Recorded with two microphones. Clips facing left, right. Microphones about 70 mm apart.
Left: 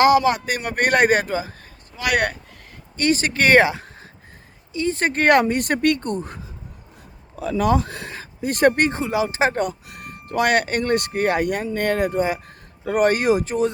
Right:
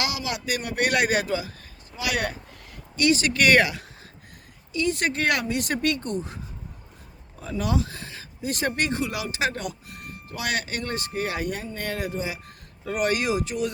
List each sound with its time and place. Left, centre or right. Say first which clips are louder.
0.0 s speech: left 14 dB; left
2.0 s speech: left 6 dB; left
3.0 s speech: left 2 dB; left
7.3 s speech: left 8 dB; left
7.6 s speech: left 7 dB; left
8.2 s speech: left 10 dB; left